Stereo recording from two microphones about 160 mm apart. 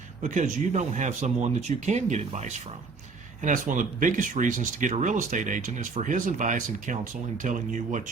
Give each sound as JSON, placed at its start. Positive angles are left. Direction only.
{"t": 0.2, "sound": "speech", "side_deg": -50}